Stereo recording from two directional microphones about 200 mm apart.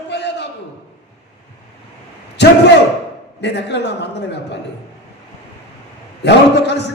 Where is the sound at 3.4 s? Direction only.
60° left (ahead or behind).